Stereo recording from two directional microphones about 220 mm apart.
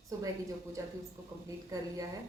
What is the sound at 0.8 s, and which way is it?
A woman's voice, 15° right (ahead or behind).